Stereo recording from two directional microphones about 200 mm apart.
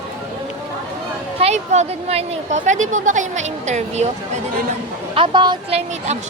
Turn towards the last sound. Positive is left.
turn(degrees=-25)  # may be behind; listen again after turning